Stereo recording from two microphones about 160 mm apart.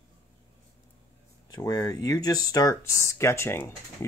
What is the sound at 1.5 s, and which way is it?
Speech, 20° left (ahead or behind).